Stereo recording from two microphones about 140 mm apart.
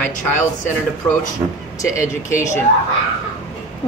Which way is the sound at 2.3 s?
25° left (ahead or behind).